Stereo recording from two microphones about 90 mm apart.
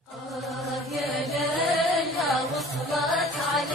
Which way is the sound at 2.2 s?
Centre (ahead or behind).